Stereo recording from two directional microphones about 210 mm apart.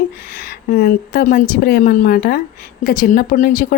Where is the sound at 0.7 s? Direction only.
45° left (ahead or behind).